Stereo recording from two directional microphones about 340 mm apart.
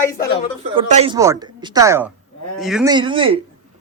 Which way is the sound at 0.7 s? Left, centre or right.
Centre.